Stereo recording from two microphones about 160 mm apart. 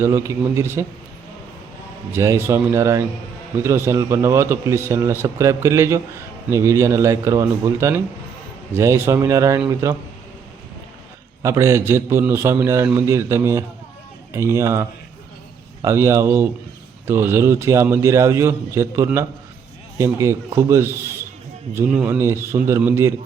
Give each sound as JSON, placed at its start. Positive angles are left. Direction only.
{"t": 0.0, "sound": "a man's voice", "side_deg": -15}
{"t": 2.1, "sound": "a man's voice", "side_deg": -15}
{"t": 11.4, "sound": "a man's voice", "side_deg": -20}